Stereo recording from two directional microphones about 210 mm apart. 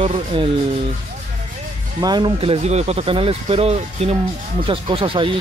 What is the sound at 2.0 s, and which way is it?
Speech, 20° right (ahead or behind).